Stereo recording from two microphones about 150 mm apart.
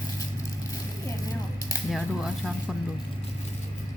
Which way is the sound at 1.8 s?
Centre (ahead or behind).